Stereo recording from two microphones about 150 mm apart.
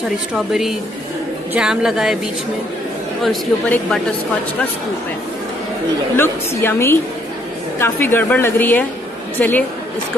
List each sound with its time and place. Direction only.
0.3 s a woman's voice: 5° right (ahead or behind)
3.3 s a woman's voice: 5° left (ahead or behind)
6.1 s a woman's voice: 15° left (ahead or behind)